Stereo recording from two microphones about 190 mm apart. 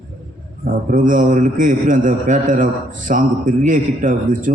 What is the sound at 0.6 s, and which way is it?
A man's voice, 45° right (ahead or behind).